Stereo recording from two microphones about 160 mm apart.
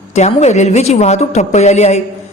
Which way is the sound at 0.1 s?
45° left (ahead or behind).